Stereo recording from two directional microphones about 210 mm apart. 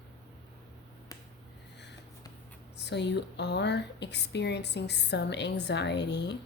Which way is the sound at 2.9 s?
55° left (ahead or behind).